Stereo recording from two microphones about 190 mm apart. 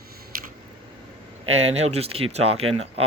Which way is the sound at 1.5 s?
35° right (ahead or behind).